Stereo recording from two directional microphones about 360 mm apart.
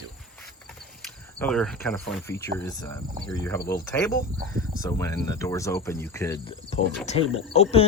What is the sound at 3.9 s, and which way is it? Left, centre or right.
Cricket, centre.